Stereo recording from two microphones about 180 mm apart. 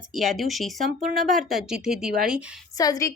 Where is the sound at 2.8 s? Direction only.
20° left (ahead or behind).